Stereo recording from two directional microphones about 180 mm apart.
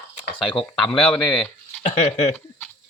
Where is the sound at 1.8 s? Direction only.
40° left (ahead or behind).